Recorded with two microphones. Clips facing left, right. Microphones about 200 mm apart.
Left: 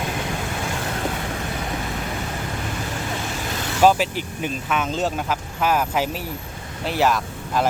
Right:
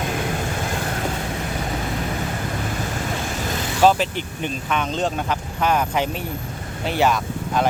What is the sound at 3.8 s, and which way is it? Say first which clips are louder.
Speech: even; 5° left (ahead or behind).